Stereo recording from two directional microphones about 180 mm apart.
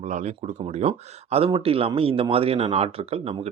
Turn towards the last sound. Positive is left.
turn(degrees=-30)  # may be behind; listen again after turning